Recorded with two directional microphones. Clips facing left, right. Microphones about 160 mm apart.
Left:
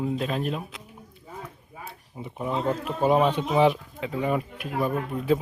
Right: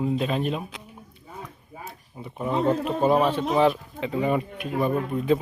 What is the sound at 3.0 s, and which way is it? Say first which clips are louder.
Speech: even; 15° left (ahead or behind).